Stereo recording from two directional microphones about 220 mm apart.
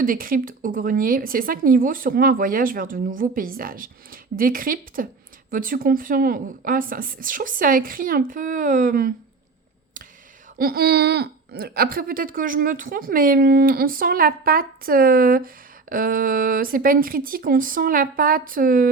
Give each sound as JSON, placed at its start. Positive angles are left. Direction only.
{"t": 0.0, "sound": "speech", "side_deg": -40}
{"t": 10.6, "sound": "speech", "side_deg": -45}